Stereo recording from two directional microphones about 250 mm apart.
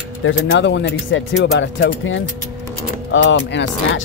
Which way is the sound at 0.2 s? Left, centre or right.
Left.